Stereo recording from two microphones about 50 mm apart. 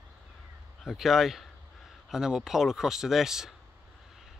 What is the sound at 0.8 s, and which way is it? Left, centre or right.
A man's voice, centre.